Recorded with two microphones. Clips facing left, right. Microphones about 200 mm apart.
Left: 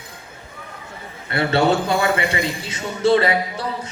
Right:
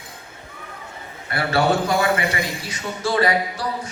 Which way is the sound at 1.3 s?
25° left (ahead or behind).